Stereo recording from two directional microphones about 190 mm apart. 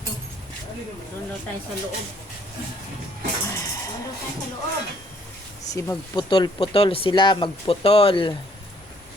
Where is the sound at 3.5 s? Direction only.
15° left (ahead or behind).